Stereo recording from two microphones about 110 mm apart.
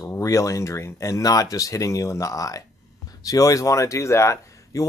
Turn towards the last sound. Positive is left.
turn(degrees=25)  # may be behind; listen again after turning